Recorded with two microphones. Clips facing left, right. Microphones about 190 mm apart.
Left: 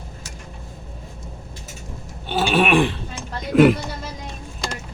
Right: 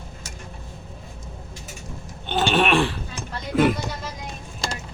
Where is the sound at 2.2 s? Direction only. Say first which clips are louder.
Left 2 dB; 5° left (ahead or behind).